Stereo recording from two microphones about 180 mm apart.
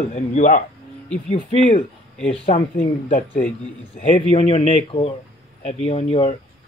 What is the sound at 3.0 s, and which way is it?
Speech, 50° left (ahead or behind).